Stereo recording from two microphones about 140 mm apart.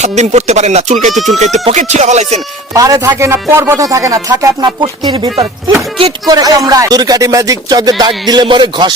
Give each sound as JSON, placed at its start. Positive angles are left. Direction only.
{"t": 0.0, "sound": "speech", "side_deg": -55}
{"t": 1.1, "sound": "speech", "side_deg": 0}
{"t": 1.5, "sound": "speech", "side_deg": -50}
{"t": 2.7, "sound": "speech", "side_deg": -25}